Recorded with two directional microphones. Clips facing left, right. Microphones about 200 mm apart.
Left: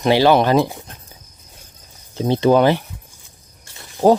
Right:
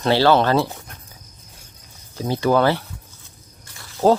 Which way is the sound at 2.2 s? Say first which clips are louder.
Left 4 dB; 25° left (ahead or behind).